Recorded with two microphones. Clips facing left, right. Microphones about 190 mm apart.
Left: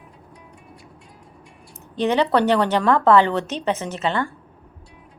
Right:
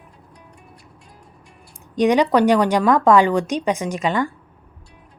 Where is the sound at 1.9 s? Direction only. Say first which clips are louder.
Right 3 dB; 15° right (ahead or behind).